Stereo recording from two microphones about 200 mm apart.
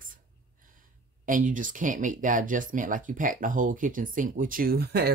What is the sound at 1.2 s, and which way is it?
Speech, 40° right (ahead or behind).